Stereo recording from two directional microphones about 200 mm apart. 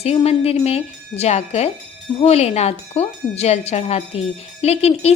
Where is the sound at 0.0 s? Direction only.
30° left (ahead or behind).